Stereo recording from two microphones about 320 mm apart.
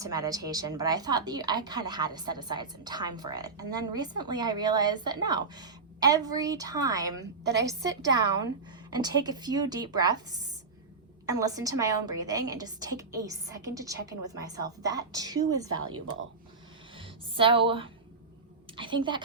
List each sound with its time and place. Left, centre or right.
0.0 s a woman's voice: centre
11.3 s a woman's voice: centre
17.0 s a sound: centre
18.8 s a woman's voice: centre